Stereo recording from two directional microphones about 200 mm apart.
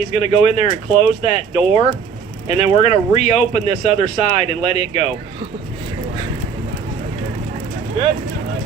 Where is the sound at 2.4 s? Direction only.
35° left (ahead or behind).